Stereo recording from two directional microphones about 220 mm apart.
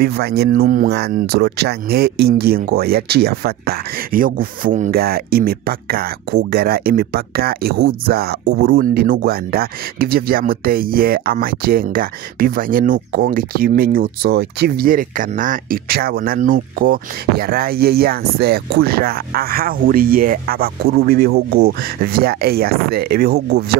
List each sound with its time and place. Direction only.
0.0 s speech: 45° right (ahead or behind)